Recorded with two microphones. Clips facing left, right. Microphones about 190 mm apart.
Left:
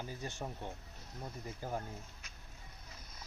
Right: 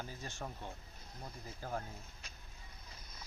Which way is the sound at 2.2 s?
30° right (ahead or behind).